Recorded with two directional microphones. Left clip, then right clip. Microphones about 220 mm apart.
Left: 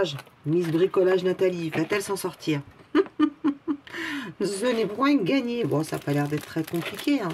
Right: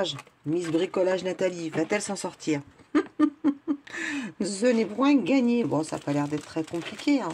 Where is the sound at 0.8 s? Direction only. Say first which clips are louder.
Left 4 dB; 25° right (ahead or behind).